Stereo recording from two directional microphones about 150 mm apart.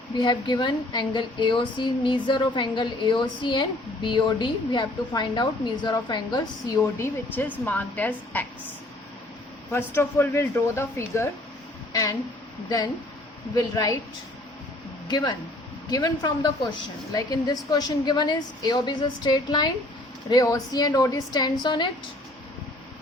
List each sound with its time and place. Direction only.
0.2 s a woman's voice: 30° left (ahead or behind)
6.7 s a woman's voice: 15° left (ahead or behind)
9.7 s a woman's voice: 15° left (ahead or behind)
12.6 s a woman's voice: 25° left (ahead or behind)
15.0 s a woman's voice: 25° left (ahead or behind)